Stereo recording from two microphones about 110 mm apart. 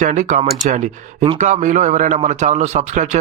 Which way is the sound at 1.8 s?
90° right.